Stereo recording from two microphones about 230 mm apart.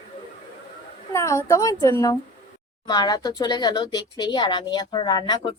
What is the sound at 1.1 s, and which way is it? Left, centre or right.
A woman's voice, centre.